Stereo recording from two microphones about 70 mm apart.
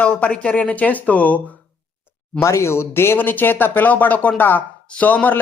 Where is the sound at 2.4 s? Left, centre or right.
Left.